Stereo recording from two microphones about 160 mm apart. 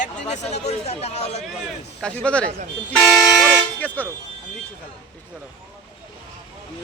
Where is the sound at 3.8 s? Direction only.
10° left (ahead or behind).